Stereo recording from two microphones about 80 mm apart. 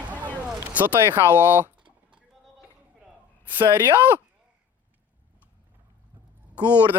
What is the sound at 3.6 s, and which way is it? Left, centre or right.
Speech, right.